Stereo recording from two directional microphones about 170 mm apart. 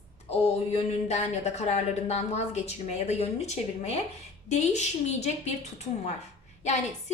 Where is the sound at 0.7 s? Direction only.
40° left (ahead or behind).